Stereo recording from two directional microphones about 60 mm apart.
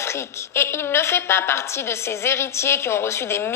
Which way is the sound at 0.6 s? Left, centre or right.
Left.